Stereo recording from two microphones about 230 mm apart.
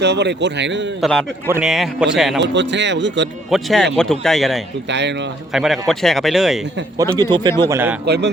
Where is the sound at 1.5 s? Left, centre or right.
Centre.